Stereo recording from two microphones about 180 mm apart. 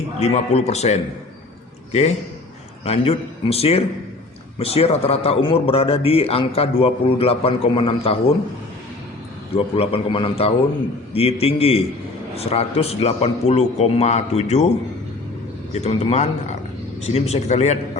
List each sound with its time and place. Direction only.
0.3 s a man's voice: 35° left (ahead or behind)
9.6 s a man's voice: 30° left (ahead or behind)
15.7 s a man's voice: 35° left (ahead or behind)